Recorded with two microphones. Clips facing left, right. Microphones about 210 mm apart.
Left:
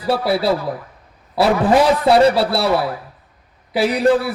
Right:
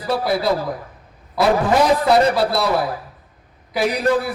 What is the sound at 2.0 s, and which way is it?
Speech, 30° left (ahead or behind).